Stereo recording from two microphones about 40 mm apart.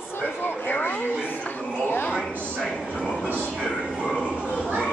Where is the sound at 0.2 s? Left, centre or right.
Left.